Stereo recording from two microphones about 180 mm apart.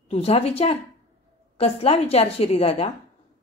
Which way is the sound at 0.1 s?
35° left (ahead or behind).